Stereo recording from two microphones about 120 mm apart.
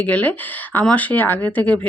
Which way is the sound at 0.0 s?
15° left (ahead or behind).